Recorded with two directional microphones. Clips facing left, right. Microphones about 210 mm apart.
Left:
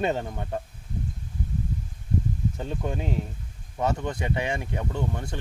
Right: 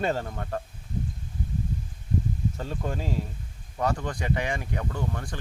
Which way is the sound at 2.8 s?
20° left (ahead or behind).